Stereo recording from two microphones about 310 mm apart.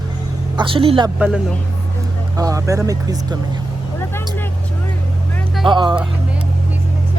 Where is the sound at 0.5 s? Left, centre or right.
Centre.